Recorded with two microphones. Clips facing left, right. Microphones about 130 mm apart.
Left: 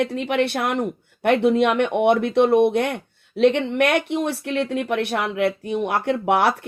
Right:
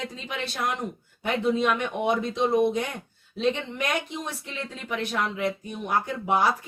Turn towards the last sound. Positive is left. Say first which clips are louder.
# left 5 dB
turn(degrees=70)  # may be behind; listen again after turning